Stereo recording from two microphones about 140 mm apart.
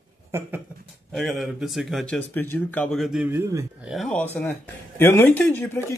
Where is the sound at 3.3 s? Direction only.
20° right (ahead or behind).